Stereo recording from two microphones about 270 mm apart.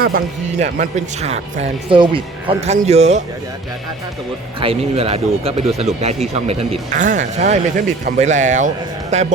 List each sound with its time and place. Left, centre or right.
0.6 s speech: right
4.6 s speech: right